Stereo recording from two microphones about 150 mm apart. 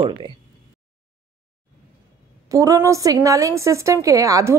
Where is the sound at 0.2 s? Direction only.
35° right (ahead or behind).